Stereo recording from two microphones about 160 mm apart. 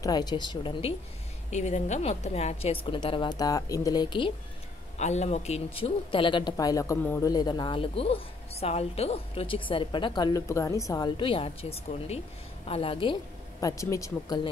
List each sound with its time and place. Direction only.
0.0 s speech: 25° left (ahead or behind)
1.5 s a woman's voice: 45° left (ahead or behind); by 4.3 s 25° left (ahead or behind)
4.9 s a woman's voice: 45° left (ahead or behind)
6.5 s speech: 20° left (ahead or behind)
11.1 s a woman's voice: 35° left (ahead or behind)
13.6 s speech: 20° left (ahead or behind)